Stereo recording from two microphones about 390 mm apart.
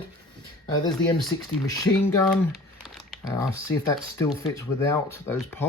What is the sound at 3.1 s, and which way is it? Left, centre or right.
Typing, centre.